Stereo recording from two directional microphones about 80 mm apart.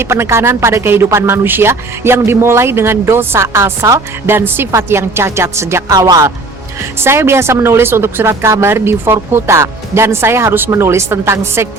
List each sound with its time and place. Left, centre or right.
0.0 s speech: right
4.4 s speech: right
5.9 s speech: right
7.0 s speech: right